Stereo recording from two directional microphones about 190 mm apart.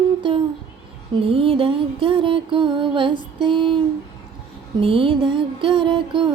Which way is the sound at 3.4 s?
25° right (ahead or behind).